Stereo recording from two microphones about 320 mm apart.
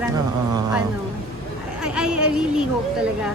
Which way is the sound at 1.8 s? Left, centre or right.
Centre.